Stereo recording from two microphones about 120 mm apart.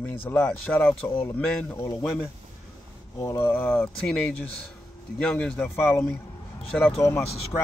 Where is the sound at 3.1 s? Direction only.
20° left (ahead or behind).